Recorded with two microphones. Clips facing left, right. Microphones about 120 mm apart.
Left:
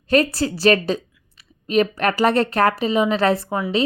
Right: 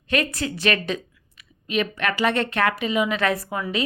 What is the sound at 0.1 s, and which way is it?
A woman's voice, 35° left (ahead or behind).